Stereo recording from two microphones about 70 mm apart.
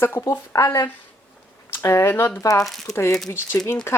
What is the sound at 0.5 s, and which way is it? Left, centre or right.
Speech, left.